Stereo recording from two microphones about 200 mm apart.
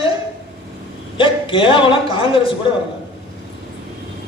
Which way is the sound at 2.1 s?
25° left (ahead or behind).